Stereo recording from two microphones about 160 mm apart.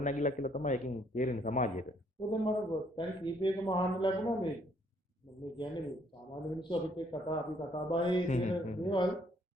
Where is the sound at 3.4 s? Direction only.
30° left (ahead or behind).